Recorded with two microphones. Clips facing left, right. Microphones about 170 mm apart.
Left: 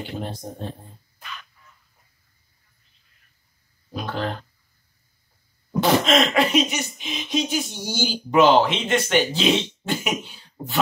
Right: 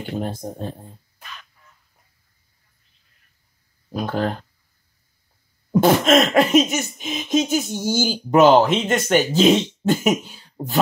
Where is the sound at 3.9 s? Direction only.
45° right (ahead or behind).